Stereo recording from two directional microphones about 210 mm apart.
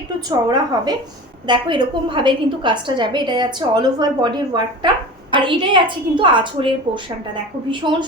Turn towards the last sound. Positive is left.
turn(degrees=-25)  # may be behind; listen again after turning